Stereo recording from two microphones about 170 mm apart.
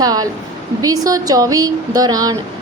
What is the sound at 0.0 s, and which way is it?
A woman's voice, 20° right (ahead or behind).